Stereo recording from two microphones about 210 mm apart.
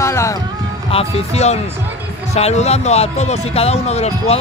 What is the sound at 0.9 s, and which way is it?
Speech, 30° left (ahead or behind).